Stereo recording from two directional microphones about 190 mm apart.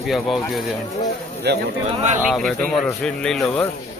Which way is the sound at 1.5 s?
60° right (ahead or behind).